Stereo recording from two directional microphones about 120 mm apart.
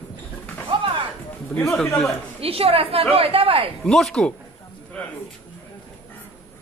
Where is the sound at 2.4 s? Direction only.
55° right (ahead or behind).